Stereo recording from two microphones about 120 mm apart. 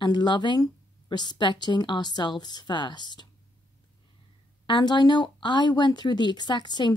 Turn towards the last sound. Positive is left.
turn(degrees=40)  # may be behind; listen again after turning